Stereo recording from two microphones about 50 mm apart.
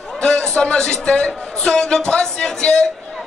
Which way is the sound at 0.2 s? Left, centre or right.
Centre.